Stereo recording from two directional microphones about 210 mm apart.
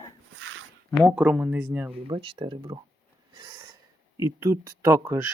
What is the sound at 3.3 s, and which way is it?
Snort, 25° right (ahead or behind).